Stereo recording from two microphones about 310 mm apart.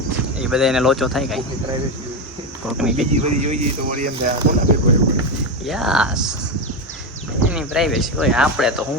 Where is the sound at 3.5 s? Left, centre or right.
Right.